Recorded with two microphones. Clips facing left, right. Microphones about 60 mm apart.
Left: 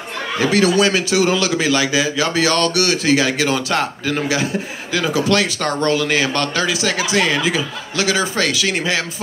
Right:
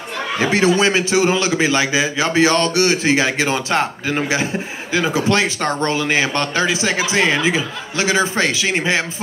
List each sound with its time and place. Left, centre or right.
0.4 s a man's voice: right